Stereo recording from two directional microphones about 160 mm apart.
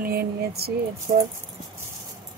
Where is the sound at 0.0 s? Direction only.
75° right (ahead or behind).